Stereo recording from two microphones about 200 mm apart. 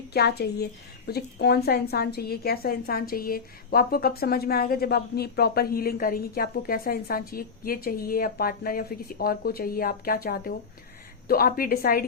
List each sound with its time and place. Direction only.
0.1 s speech: 55° left (ahead or behind)